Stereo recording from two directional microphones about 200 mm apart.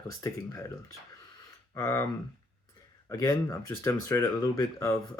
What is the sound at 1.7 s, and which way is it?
Speech, 15° left (ahead or behind).